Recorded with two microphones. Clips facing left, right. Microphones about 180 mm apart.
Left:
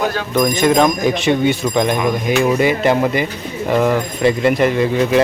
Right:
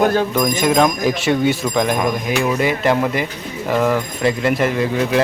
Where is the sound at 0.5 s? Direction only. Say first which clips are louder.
Left 2 dB; 5° right (ahead or behind).